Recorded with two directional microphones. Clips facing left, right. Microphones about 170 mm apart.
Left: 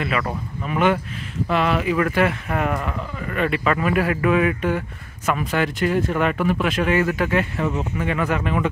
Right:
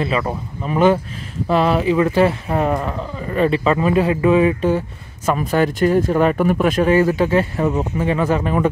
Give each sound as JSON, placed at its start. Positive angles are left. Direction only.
{"t": 0.7, "sound": "speech", "side_deg": -35}